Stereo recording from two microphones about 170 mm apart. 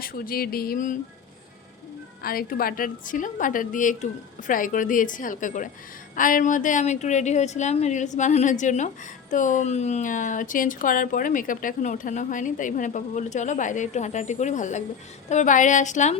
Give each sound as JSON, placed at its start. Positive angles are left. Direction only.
{"t": 0.0, "sound": "music", "side_deg": 60}
{"t": 2.2, "sound": "speech", "side_deg": 60}